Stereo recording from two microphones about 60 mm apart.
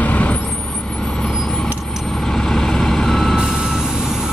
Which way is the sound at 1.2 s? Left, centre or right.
Centre.